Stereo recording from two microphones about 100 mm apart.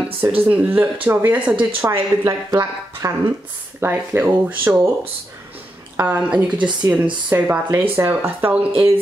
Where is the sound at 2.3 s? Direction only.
40° right (ahead or behind).